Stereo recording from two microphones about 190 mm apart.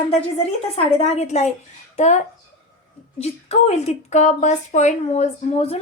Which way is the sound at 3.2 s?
35° left (ahead or behind).